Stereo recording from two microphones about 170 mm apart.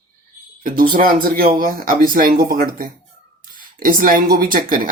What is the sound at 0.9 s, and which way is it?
Speech, 55° right (ahead or behind).